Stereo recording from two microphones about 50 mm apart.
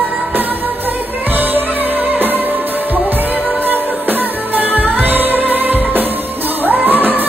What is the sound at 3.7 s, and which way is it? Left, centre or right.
Music, right.